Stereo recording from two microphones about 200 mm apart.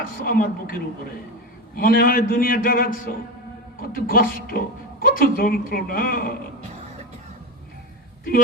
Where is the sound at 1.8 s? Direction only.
45° left (ahead or behind).